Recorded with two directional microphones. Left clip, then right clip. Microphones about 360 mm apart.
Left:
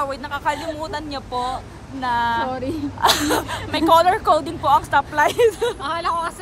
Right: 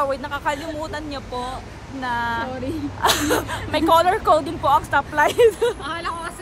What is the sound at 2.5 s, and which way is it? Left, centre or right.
Speech, centre.